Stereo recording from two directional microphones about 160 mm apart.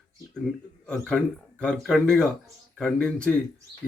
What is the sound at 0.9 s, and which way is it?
Speech, 5° left (ahead or behind).